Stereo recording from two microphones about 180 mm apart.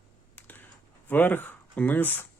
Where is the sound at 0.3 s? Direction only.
10° left (ahead or behind).